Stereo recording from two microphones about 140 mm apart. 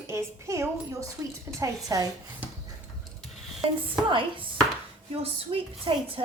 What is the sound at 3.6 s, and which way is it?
A woman's voice, 40° right (ahead or behind).